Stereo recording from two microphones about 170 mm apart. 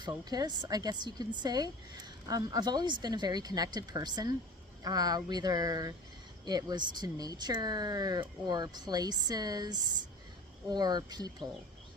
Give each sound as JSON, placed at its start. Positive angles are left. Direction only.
{"t": 0.0, "sound": "speech", "side_deg": -25}